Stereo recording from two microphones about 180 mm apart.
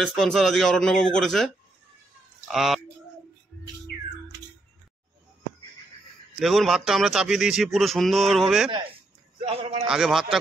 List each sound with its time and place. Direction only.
0.0 s speech: centre (ahead or behind)
6.4 s speech: centre (ahead or behind)
9.5 s a man's voice: 35° right (ahead or behind)
9.8 s speech: centre (ahead or behind)